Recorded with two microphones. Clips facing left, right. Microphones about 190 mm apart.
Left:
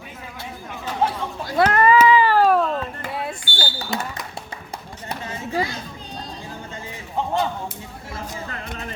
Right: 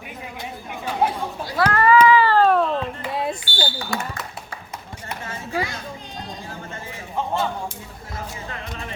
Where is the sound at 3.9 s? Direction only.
25° left (ahead or behind).